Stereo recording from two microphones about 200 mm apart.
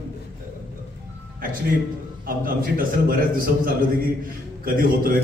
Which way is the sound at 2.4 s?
45° right (ahead or behind).